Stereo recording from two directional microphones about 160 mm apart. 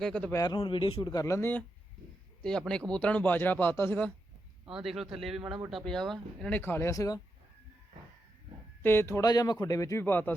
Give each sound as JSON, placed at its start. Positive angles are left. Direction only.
{"t": 0.0, "sound": "speech", "side_deg": 5}
{"t": 0.3, "sound": "speech", "side_deg": 25}
{"t": 4.6, "sound": "speech", "side_deg": -5}
{"t": 8.8, "sound": "speech", "side_deg": 15}